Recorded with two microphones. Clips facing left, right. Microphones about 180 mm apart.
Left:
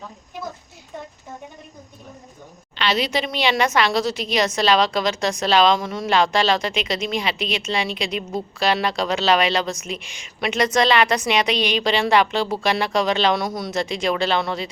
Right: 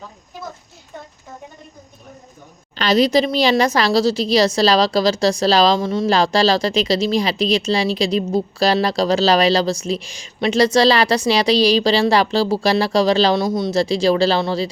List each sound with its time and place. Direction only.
2.7 s a woman's voice: 40° right (ahead or behind)